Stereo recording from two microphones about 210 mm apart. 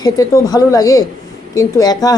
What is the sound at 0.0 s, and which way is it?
Speech, 15° left (ahead or behind).